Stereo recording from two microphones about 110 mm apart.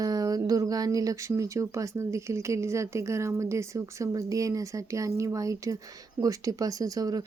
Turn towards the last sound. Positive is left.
turn(degrees=-35)  # may be behind; listen again after turning